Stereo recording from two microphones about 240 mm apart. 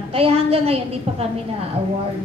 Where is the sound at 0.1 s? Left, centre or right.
Right.